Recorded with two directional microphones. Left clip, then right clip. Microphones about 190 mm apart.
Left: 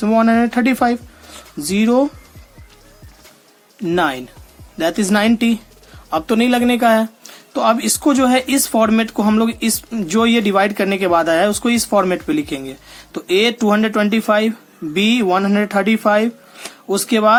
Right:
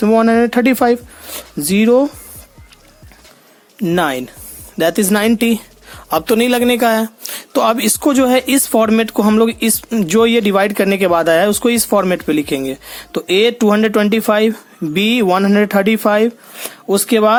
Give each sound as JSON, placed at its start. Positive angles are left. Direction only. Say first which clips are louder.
{"t": 0.0, "sound": "speech", "louder": "right 3 dB", "side_deg": -40}
{"t": 3.8, "sound": "speech", "louder": "right 2 dB", "side_deg": -40}